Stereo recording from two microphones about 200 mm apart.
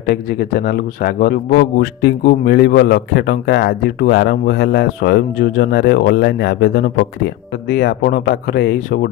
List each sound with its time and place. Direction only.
0.0 s speech: 50° left (ahead or behind)